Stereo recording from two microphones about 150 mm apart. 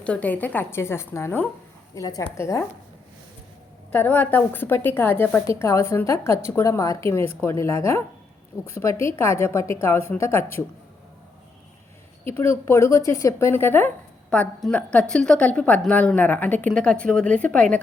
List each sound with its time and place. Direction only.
0.0 s a woman's voice: 10° left (ahead or behind)
3.9 s a woman's voice: 10° left (ahead or behind)
12.3 s speech: 15° left (ahead or behind)